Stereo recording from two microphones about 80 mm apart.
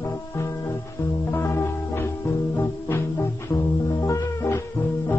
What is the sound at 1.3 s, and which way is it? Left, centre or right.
Music, left.